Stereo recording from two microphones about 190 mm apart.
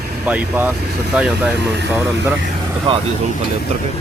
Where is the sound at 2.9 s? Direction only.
25° right (ahead or behind).